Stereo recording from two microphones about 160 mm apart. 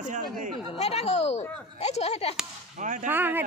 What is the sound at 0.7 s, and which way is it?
Speech, 40° left (ahead or behind).